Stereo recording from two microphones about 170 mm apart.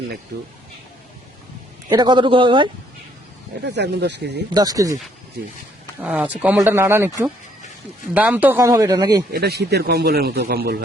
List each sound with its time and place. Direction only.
1.9 s speech: 25° right (ahead or behind)
3.6 s speech: 85° right
4.5 s speech: 20° right (ahead or behind)
6.0 s speech: 10° right (ahead or behind)
8.1 s speech: 10° right (ahead or behind); by 9.2 s 25° right (ahead or behind)
9.3 s a man's voice: 70° right (ahead or behind)